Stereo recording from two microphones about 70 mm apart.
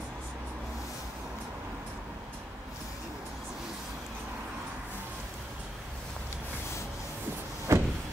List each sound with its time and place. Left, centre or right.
7.7 s vehicle: right